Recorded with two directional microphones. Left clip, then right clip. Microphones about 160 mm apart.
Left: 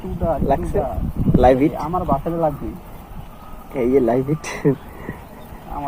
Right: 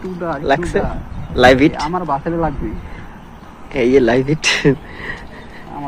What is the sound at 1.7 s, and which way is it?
Speech, 35° left (ahead or behind).